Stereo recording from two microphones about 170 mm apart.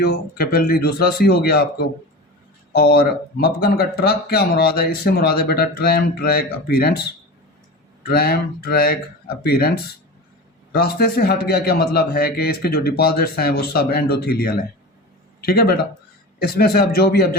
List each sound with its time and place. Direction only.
0.0 s speech: 65° left (ahead or behind)
8.0 s a man's voice: 65° left (ahead or behind)